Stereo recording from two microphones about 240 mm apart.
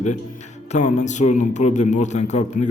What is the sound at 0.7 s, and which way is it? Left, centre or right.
A man's voice, left.